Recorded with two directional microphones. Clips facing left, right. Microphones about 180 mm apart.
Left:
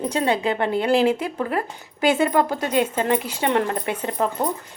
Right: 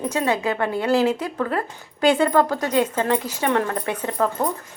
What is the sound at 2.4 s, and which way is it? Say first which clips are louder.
Speech: right 1 dB; 25° left (ahead or behind).